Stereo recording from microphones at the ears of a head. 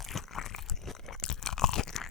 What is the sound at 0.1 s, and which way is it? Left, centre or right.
Crunch, left.